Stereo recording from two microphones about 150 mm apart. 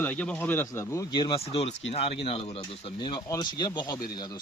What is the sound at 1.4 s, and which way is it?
Speech, 40° left (ahead or behind).